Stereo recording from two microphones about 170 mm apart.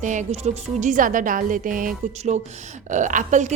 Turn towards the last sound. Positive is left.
turn(degrees=-50)  # may be behind; listen again after turning